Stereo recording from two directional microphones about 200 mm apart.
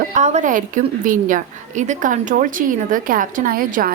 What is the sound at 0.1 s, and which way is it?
A woman's voice, 35° right (ahead or behind).